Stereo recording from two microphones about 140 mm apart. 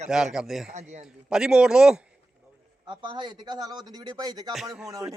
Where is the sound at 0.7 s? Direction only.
55° right (ahead or behind).